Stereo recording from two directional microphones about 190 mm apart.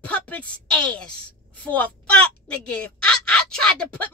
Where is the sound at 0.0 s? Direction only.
5° left (ahead or behind).